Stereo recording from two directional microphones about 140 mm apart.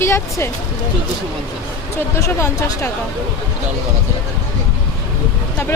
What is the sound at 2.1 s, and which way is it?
Speech, 20° left (ahead or behind).